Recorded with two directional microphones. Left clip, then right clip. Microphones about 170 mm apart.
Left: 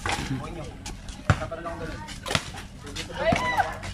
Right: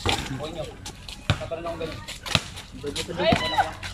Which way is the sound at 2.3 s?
50° left (ahead or behind).